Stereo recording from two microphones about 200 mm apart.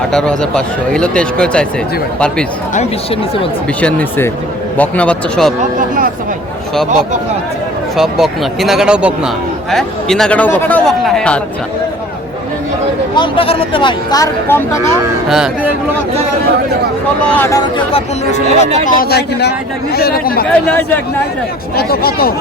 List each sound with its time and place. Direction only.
0.1 s speech: 5° left (ahead or behind)
3.8 s speech: 5° left (ahead or behind)
7.9 s speech: centre (ahead or behind)
13.1 s speech: 25° left (ahead or behind)
17.2 s speech: 10° left (ahead or behind)
17.9 s speech: 35° left (ahead or behind)
18.9 s speech: 50° left (ahead or behind)
20.5 s speech: 10° left (ahead or behind)
21.8 s speech: 50° left (ahead or behind)